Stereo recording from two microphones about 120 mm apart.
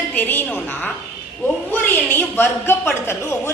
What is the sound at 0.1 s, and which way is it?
A woman's voice, 15° left (ahead or behind).